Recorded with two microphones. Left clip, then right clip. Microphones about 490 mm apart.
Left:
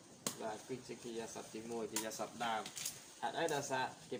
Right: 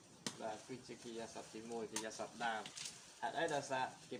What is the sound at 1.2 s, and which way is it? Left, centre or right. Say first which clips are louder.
Speech: left 2 dB; right.